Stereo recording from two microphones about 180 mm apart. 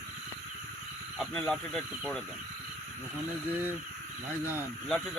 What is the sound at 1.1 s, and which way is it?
Speech, 5° left (ahead or behind).